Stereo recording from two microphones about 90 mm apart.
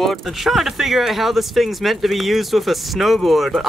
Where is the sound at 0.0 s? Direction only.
Centre (ahead or behind).